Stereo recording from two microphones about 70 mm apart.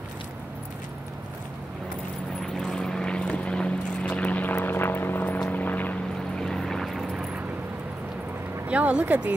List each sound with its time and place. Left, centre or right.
2.4 s vehicle: centre
6.3 s vehicle: centre
8.6 s speech: centre